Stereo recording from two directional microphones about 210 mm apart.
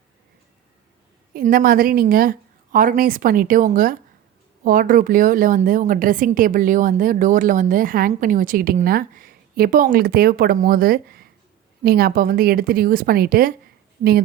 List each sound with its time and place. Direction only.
1.3 s a woman's voice: 45° right (ahead or behind)